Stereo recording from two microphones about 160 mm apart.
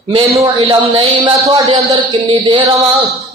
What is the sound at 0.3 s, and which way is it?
Speech, 25° right (ahead or behind).